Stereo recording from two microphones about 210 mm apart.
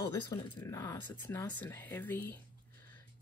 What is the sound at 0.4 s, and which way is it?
Speech, 20° left (ahead or behind).